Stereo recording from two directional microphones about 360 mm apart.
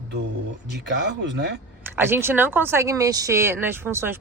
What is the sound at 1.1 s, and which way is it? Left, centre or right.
Speech, right.